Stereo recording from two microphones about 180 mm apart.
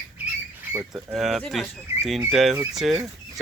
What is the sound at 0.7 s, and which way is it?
Speech, 15° right (ahead or behind).